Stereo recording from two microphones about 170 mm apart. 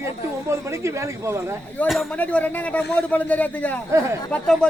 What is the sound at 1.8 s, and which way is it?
Speech, 5° left (ahead or behind).